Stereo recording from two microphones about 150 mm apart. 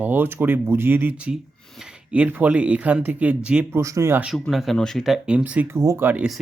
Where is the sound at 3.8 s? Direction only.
20° right (ahead or behind).